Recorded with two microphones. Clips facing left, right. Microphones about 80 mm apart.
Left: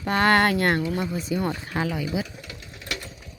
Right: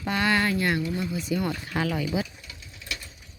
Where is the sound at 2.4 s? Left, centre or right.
Left.